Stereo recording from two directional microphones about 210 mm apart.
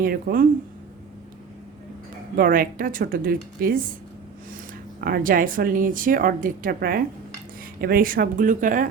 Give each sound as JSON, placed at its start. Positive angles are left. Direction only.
{"t": 0.0, "sound": "speech", "side_deg": -45}
{"t": 2.3, "sound": "speech", "side_deg": -40}
{"t": 4.9, "sound": "speech", "side_deg": -45}